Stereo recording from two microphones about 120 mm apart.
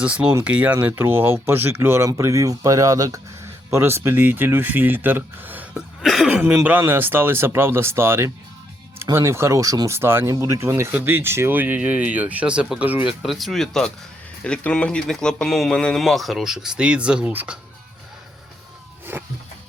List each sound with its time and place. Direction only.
0.0 s speech: 10° right (ahead or behind)
6.0 s speech: centre (ahead or behind)
6.4 s speech: 15° right (ahead or behind)
13.2 s speech: centre (ahead or behind)
19.1 s speech: 20° right (ahead or behind)